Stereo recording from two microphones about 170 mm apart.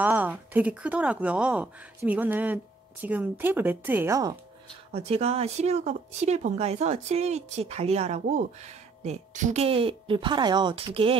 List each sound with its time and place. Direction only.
0.0 s speech: 10° right (ahead or behind)
4.9 s speech: 35° right (ahead or behind)